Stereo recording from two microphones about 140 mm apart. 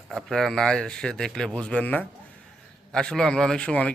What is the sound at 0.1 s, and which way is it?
A man's voice, centre (ahead or behind).